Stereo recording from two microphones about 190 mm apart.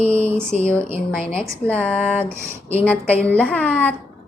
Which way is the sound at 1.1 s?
5° left (ahead or behind).